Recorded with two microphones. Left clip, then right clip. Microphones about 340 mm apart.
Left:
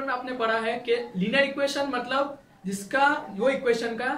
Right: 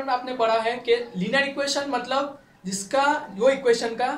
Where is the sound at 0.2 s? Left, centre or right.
Centre.